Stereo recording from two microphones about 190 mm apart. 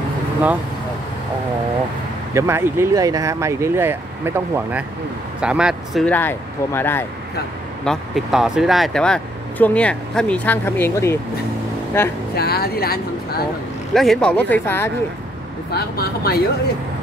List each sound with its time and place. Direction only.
2.3 s speech: 15° right (ahead or behind)
6.0 s speech: 10° left (ahead or behind)
7.8 s speech: centre (ahead or behind)
12.4 s speech: 55° left (ahead or behind)
13.9 s speech: centre (ahead or behind)
15.7 s speech: 55° left (ahead or behind)